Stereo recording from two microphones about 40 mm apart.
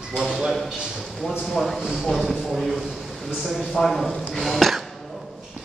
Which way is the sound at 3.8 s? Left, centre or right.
Centre.